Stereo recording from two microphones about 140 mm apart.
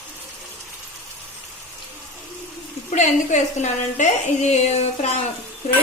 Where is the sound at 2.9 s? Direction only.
55° left (ahead or behind).